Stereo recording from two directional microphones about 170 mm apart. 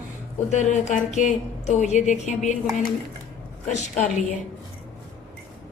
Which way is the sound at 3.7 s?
45° left (ahead or behind).